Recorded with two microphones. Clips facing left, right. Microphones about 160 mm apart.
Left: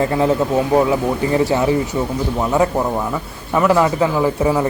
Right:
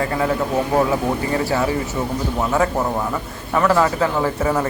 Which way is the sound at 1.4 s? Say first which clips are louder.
Left 4 dB; 20° left (ahead or behind).